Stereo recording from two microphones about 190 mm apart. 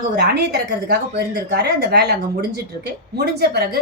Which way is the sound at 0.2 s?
60° right (ahead or behind).